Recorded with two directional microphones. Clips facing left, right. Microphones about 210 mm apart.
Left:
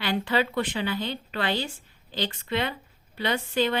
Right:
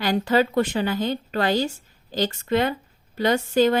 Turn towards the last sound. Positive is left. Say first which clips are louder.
# right 7 dB
turn(degrees=-45)  # may be behind; listen again after turning